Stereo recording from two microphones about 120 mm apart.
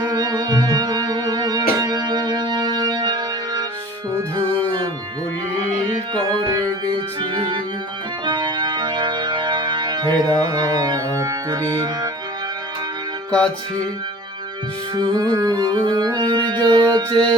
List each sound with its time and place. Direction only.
0.0 s music: 30° right (ahead or behind)
6.1 s music: 30° right (ahead or behind)
7.2 s organ: 45° right (ahead or behind)
8.2 s music: 40° right (ahead or behind)
14.9 s music: 35° right (ahead or behind)